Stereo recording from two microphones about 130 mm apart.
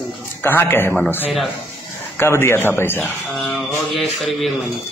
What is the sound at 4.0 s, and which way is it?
Speech, centre (ahead or behind).